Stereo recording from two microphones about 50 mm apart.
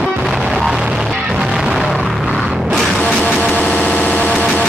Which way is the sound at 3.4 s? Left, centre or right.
Left.